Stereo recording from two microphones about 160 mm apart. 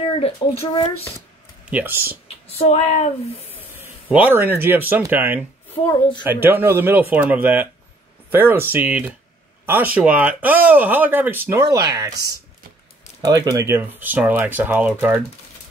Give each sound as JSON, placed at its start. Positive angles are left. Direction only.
{"t": 0.2, "sound": "speech", "side_deg": 40}
{"t": 1.7, "sound": "speech", "side_deg": -10}
{"t": 2.5, "sound": "speech", "side_deg": 40}
{"t": 3.6, "sound": "speech", "side_deg": -10}
{"t": 5.9, "sound": "speech", "side_deg": 30}
{"t": 6.4, "sound": "speech", "side_deg": -15}
{"t": 13.2, "sound": "speech", "side_deg": -25}